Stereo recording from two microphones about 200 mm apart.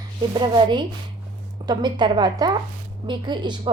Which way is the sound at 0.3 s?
25° right (ahead or behind).